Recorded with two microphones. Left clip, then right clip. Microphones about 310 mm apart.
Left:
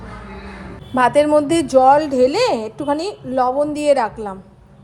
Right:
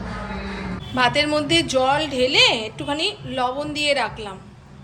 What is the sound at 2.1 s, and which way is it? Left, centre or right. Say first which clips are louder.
Speech: left 2 dB; left.